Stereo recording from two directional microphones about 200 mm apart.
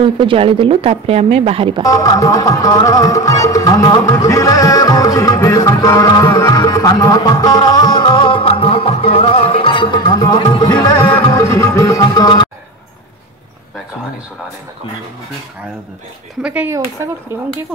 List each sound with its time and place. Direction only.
0.0 s a woman's voice: 25° right (ahead or behind)
1.8 s music: 15° left (ahead or behind)
16.4 s speech: 10° right (ahead or behind)